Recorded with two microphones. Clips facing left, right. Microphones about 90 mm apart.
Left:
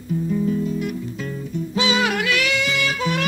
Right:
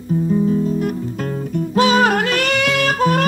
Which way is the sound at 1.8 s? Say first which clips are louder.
Right 7 dB; 45° right (ahead or behind).